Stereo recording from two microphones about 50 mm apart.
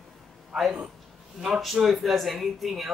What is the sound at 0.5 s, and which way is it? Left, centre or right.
A man's voice, centre.